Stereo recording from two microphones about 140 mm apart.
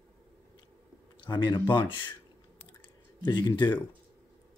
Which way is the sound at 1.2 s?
30° left (ahead or behind).